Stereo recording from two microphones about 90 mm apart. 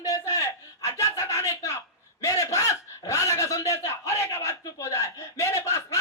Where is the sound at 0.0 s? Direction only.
40° left (ahead or behind).